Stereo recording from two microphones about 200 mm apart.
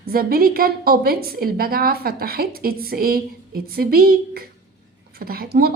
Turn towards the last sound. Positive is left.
turn(degrees=-50)  # may be behind; listen again after turning